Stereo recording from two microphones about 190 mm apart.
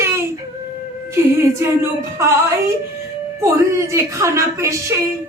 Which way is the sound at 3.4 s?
15° right (ahead or behind).